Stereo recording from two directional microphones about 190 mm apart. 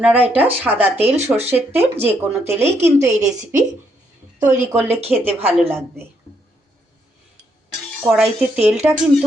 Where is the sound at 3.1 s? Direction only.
40° right (ahead or behind).